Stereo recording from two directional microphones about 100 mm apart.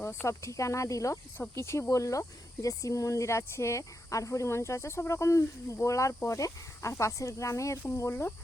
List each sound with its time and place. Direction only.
0.0 s speech: 25° left (ahead or behind)